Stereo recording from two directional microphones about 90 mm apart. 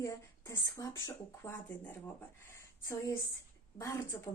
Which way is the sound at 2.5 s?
35° left (ahead or behind).